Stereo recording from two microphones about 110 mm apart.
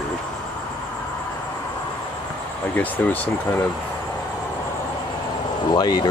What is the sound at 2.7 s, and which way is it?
Speech, 15° left (ahead or behind).